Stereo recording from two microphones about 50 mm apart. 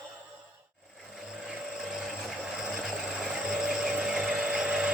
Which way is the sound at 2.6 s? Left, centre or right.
Centre.